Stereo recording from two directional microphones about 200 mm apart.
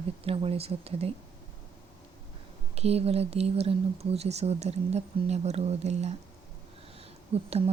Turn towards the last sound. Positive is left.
turn(degrees=-30)  # may be behind; listen again after turning